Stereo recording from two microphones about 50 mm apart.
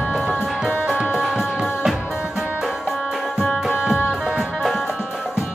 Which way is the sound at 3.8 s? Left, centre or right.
Right.